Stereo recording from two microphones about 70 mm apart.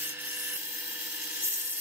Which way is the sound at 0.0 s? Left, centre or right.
Right.